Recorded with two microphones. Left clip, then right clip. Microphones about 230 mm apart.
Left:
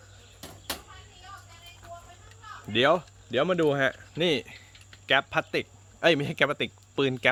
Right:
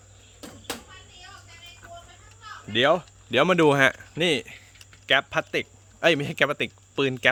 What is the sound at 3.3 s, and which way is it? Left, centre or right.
Speech, right.